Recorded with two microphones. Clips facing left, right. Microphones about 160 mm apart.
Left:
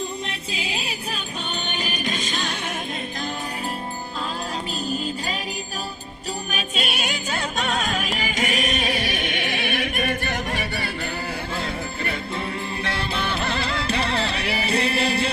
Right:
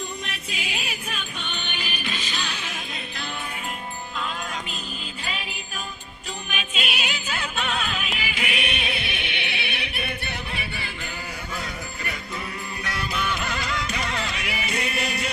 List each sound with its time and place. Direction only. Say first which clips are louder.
0.3 s music: left 3 dB; 30° left (ahead or behind); by 2.7 s 45° left (ahead or behind)
6.5 s music: left 1 dB; 40° left (ahead or behind)
11.5 s music: left 5 dB; 30° left (ahead or behind)